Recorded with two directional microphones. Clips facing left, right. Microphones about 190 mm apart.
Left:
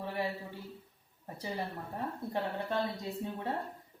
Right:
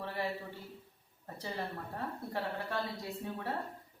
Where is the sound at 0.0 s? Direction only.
15° left (ahead or behind).